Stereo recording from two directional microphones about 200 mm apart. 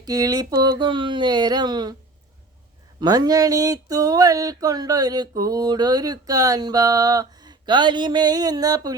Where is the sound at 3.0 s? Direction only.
20° right (ahead or behind).